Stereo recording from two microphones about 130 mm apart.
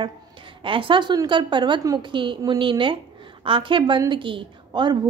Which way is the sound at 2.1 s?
40° right (ahead or behind).